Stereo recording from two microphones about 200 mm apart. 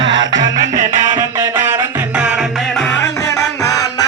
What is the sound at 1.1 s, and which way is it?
Music, 15° right (ahead or behind).